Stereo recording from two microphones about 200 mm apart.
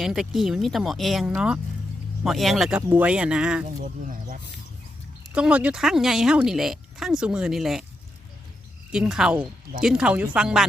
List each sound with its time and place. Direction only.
0.0 s speech: centre (ahead or behind)
3.8 s speech: 40° right (ahead or behind)
5.3 s speech: 5° right (ahead or behind)
8.9 s speech: 5° right (ahead or behind)